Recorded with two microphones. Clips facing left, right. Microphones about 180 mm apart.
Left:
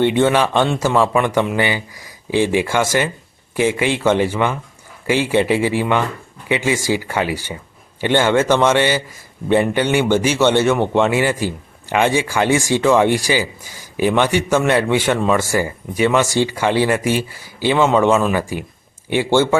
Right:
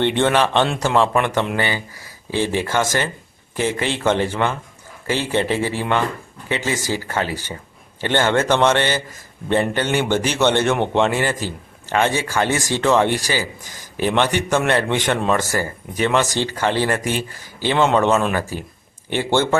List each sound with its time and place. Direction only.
0.0 s a man's voice: 10° left (ahead or behind)